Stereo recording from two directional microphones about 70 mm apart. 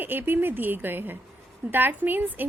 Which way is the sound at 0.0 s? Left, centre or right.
Right.